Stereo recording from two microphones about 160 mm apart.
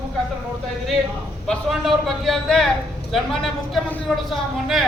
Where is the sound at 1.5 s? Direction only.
Centre (ahead or behind).